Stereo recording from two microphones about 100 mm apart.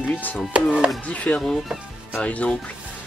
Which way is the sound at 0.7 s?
5° right (ahead or behind).